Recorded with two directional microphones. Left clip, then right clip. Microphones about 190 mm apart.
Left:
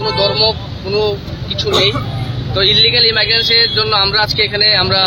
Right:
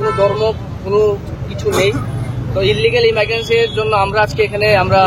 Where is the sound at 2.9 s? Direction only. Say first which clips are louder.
Left 1 dB; 35° left (ahead or behind).